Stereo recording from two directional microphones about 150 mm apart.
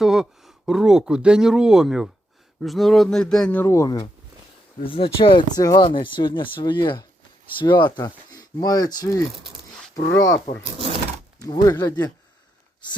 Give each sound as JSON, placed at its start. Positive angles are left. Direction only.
{"t": 0.0, "sound": "speech", "side_deg": -5}
{"t": 3.7, "sound": "speech", "side_deg": 25}
{"t": 11.4, "sound": "speech", "side_deg": 25}